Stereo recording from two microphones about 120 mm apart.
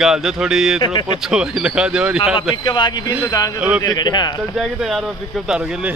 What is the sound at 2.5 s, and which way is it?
A man's voice, 40° left (ahead or behind).